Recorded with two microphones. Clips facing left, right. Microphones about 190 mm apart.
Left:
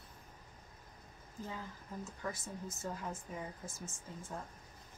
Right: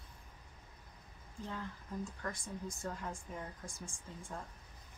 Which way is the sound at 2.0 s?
5° left (ahead or behind).